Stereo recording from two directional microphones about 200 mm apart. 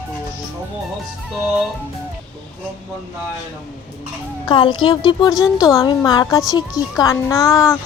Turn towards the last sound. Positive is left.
turn(degrees=15)  # may be behind; listen again after turning